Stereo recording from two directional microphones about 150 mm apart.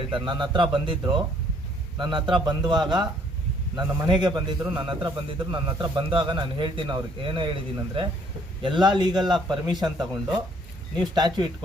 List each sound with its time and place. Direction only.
0.1 s a man's voice: 30° right (ahead or behind)